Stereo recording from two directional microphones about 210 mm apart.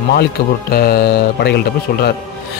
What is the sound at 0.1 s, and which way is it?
A man's voice, 45° left (ahead or behind).